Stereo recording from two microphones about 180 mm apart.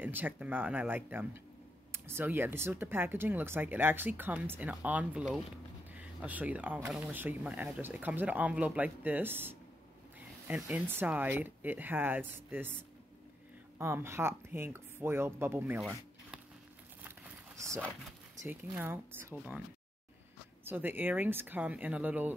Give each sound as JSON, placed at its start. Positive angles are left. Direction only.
{"t": 0.0, "sound": "speech", "side_deg": -10}
{"t": 13.7, "sound": "speech", "side_deg": -15}
{"t": 17.6, "sound": "speech", "side_deg": -15}
{"t": 20.6, "sound": "speech", "side_deg": -10}